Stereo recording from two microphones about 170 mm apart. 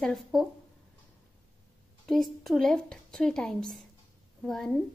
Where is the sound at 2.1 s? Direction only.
Centre (ahead or behind).